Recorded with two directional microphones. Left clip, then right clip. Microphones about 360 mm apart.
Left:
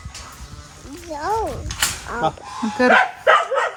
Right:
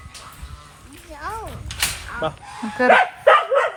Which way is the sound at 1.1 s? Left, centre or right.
Centre.